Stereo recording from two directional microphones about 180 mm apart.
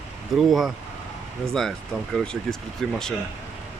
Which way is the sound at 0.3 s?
Centre (ahead or behind).